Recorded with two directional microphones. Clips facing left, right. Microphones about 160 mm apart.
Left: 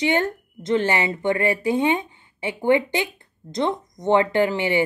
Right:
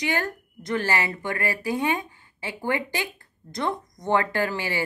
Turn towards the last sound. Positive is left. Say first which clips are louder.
# left 7 dB
turn(degrees=20)  # may be behind; listen again after turning